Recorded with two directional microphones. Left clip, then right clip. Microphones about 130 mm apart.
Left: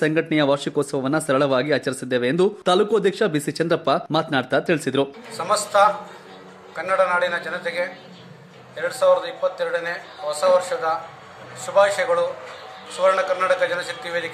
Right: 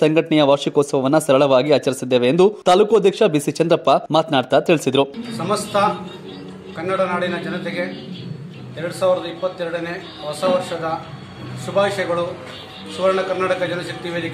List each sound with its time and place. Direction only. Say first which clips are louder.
0.0 s speech: right 5 dB; 25° right (ahead or behind)
5.3 s a man's voice: even; 15° left (ahead or behind)